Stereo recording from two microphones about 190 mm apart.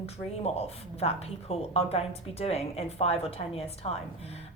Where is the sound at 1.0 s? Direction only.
30° left (ahead or behind).